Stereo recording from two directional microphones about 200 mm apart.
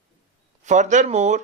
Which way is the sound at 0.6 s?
35° right (ahead or behind).